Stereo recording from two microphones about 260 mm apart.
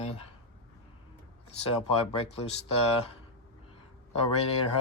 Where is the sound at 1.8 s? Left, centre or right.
Left.